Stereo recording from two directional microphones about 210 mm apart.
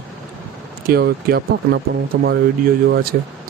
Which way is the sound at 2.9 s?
45° right (ahead or behind).